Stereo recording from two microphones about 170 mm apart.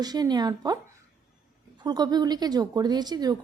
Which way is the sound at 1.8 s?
25° right (ahead or behind).